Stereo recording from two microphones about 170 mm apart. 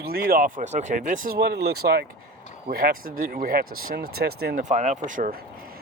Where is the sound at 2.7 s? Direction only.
60° right (ahead or behind).